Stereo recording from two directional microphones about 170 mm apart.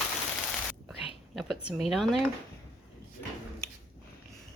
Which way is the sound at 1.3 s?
Centre (ahead or behind).